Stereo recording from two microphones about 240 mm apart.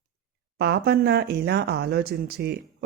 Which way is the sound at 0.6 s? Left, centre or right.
Right.